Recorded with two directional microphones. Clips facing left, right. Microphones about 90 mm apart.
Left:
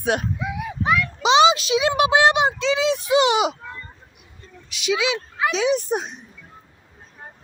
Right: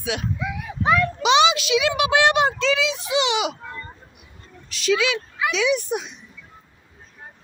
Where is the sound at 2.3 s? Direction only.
15° left (ahead or behind).